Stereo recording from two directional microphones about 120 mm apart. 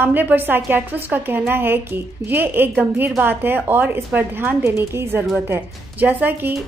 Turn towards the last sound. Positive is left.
turn(degrees=-15)  # may be behind; listen again after turning